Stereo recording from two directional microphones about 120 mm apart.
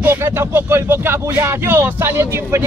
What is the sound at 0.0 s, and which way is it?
Speech, 20° right (ahead or behind).